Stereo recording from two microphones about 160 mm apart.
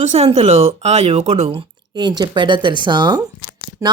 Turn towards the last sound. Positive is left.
turn(degrees=-20)  # may be behind; listen again after turning